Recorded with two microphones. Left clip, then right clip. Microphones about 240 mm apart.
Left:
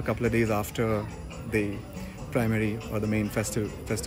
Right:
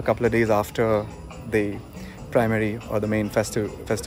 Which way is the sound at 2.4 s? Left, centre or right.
Centre.